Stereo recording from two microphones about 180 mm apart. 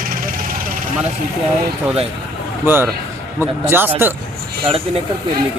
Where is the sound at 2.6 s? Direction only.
10° right (ahead or behind).